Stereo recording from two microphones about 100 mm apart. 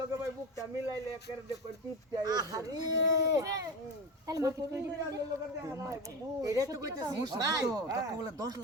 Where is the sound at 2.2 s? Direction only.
40° right (ahead or behind).